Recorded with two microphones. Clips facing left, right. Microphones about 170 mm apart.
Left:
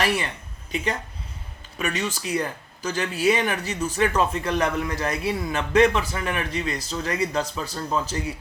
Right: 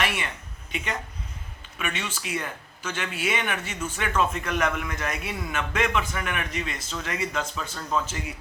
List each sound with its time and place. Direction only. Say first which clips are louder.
0.0 s speech: left 4 dB; 35° left (ahead or behind)
1.8 s speech: left 5 dB; 40° left (ahead or behind)